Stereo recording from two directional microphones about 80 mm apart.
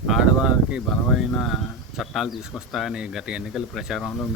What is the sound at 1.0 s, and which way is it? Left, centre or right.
Speech, centre.